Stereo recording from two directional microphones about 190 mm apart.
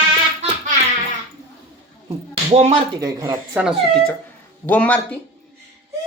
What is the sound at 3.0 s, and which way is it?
Speech, 20° right (ahead or behind).